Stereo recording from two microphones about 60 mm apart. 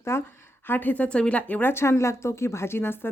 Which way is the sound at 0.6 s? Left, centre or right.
Left.